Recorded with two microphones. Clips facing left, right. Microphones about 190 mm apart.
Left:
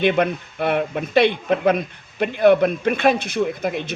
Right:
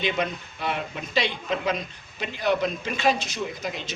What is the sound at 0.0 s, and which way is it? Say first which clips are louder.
Speech: left 8 dB; 60° left (ahead or behind).